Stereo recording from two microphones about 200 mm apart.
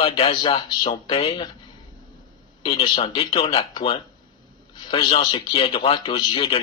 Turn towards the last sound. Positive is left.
turn(degrees=25)  # may be behind; listen again after turning